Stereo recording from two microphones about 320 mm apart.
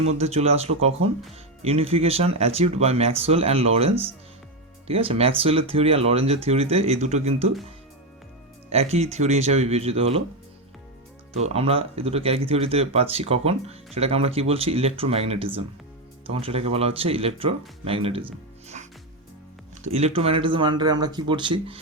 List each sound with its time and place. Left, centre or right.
0.0 s speech: centre
8.7 s speech: centre
11.4 s speech: centre
19.8 s speech: centre